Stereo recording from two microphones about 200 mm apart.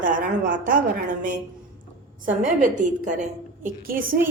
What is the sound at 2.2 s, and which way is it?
A woman's voice, 40° right (ahead or behind).